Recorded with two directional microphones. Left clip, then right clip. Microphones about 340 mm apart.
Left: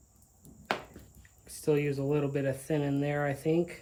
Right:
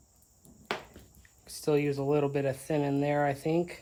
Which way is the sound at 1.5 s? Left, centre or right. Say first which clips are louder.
Right 1 dB; right.